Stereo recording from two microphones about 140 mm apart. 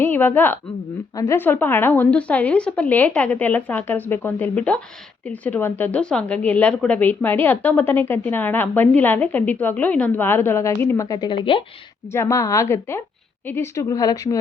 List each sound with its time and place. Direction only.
0.0 s a woman's voice: 15° left (ahead or behind); by 11.6 s 35° left (ahead or behind)
12.1 s a woman's voice: 20° left (ahead or behind)